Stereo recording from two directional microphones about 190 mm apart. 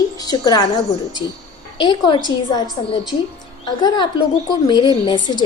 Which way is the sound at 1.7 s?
25° left (ahead or behind).